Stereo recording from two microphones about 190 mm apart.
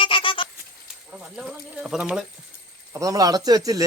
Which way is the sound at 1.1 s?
5° right (ahead or behind).